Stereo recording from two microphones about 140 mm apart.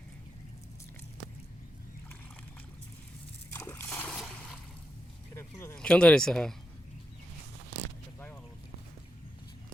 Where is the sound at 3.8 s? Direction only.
10° left (ahead or behind).